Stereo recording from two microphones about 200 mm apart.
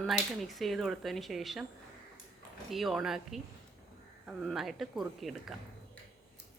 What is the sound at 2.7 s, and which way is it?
Speech, centre (ahead or behind).